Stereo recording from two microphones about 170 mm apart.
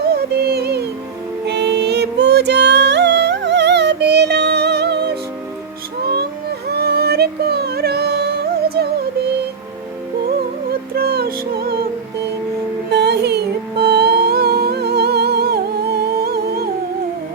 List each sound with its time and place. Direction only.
0.1 s music: 70° right (ahead or behind)
1.5 s music: 85° right
6.7 s yodeling: 70° right (ahead or behind)
10.2 s music: 60° right (ahead or behind)
12.9 s music: 75° right (ahead or behind)